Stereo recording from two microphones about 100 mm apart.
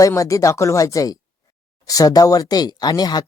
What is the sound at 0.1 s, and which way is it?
Speech, 30° left (ahead or behind).